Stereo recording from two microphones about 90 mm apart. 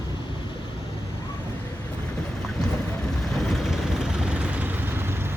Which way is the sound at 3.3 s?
Centre (ahead or behind).